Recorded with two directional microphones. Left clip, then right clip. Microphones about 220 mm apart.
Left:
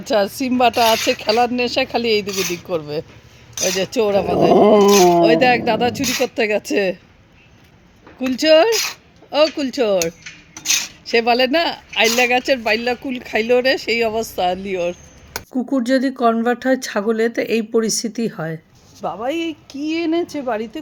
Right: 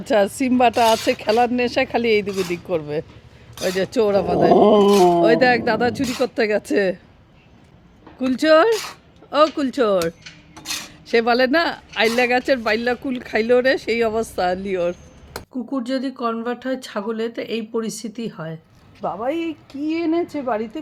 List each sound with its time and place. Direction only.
0.0 s speech: 5° right (ahead or behind)
3.5 s speech: 20° left (ahead or behind)
3.8 s speech: centre (ahead or behind)
4.5 s speech: 20° left (ahead or behind)
5.2 s speech: centre (ahead or behind)
8.2 s speech: centre (ahead or behind)
10.5 s cutlery: 15° left (ahead or behind)
11.0 s speech: centre (ahead or behind)
15.5 s speech: 30° left (ahead or behind)
19.0 s speech: 5° left (ahead or behind)